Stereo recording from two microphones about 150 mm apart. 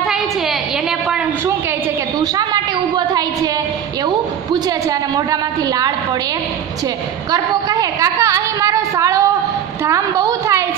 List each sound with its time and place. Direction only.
0.0 s a sound: centre (ahead or behind)
4.0 s a woman's voice: 25° right (ahead or behind)
7.2 s a woman's voice: 25° right (ahead or behind)